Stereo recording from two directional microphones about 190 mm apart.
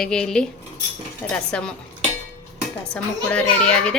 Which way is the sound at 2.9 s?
10° left (ahead or behind).